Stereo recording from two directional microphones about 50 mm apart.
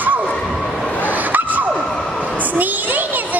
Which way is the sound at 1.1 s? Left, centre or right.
Right.